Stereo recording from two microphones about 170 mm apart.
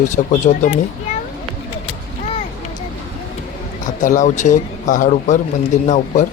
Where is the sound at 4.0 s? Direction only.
50° left (ahead or behind).